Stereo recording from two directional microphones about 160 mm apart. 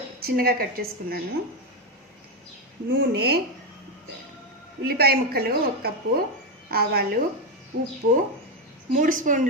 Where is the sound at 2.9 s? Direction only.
85° right.